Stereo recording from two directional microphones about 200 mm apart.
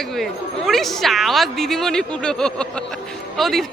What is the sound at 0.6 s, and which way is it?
Speech, centre (ahead or behind).